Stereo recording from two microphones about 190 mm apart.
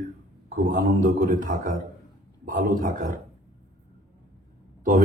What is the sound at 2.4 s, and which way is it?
Speech, 45° right (ahead or behind).